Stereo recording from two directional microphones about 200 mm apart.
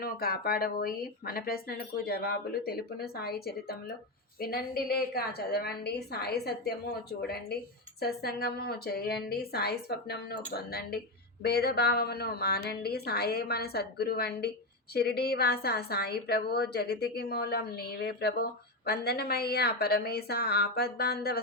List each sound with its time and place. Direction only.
0.0 s a woman's voice: 50° left (ahead or behind)